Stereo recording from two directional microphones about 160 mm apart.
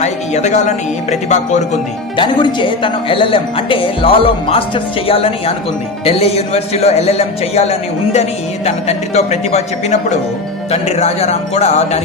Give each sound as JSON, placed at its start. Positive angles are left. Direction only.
{"t": 0.0, "sound": "a man's voice", "side_deg": 45}
{"t": 2.1, "sound": "a man's voice", "side_deg": 30}